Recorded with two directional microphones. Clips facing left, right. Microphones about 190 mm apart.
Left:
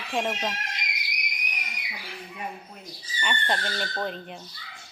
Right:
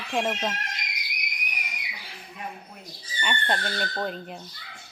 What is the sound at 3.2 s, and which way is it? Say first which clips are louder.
A woman's voice: right 1 dB; centre (ahead or behind).